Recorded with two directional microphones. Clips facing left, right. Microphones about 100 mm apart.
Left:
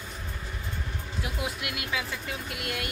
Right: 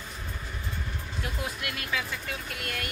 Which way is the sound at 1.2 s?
15° left (ahead or behind).